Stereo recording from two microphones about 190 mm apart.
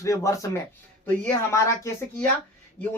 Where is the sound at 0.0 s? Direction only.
15° left (ahead or behind).